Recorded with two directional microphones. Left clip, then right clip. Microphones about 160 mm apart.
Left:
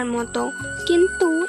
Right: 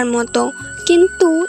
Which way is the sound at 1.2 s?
Centre (ahead or behind).